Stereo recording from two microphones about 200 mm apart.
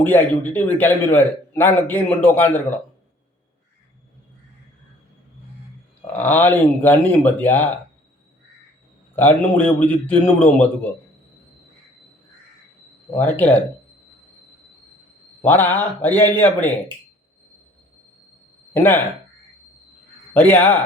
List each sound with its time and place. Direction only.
0.0 s a man's voice: 10° left (ahead or behind)
6.1 s a man's voice: 10° left (ahead or behind)
9.1 s a man's voice: 10° left (ahead or behind)
13.1 s a man's voice: 10° left (ahead or behind)
15.4 s a man's voice: 10° left (ahead or behind)
18.7 s speech: 10° left (ahead or behind)
20.3 s a man's voice: 10° left (ahead or behind)